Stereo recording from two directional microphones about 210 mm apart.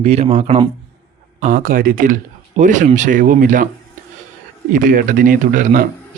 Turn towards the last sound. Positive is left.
turn(degrees=-40)  # may be behind; listen again after turning